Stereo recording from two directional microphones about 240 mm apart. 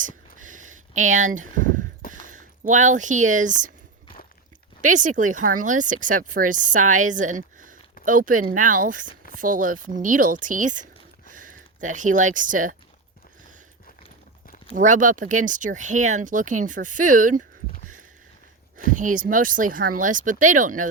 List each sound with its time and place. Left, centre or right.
0.0 s a sound: right
2.2 s speech: right
4.8 s speech: right
14.7 s speech: right
18.9 s speech: right